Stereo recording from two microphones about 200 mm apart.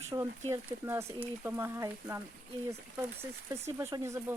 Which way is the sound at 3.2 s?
15° right (ahead or behind).